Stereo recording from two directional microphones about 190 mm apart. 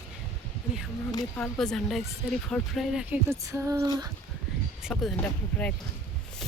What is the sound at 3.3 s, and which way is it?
Speech, 15° right (ahead or behind).